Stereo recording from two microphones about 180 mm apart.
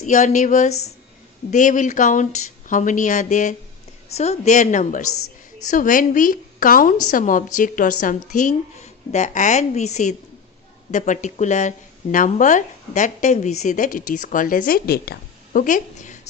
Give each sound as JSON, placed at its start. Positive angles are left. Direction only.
{"t": 0.0, "sound": "a woman's voice", "side_deg": 45}